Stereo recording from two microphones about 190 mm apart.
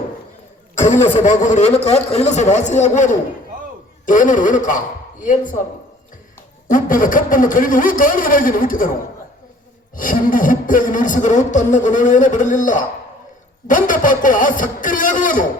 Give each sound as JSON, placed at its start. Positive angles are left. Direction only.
{"t": 0.8, "sound": "speech", "side_deg": 40}
{"t": 6.7, "sound": "speech", "side_deg": 45}
{"t": 9.9, "sound": "speech", "side_deg": 45}